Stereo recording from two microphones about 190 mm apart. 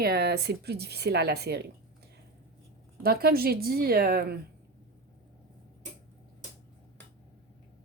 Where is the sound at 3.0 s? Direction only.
55° right (ahead or behind).